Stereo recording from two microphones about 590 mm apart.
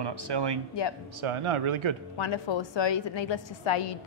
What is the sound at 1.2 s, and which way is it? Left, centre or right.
Speech, right.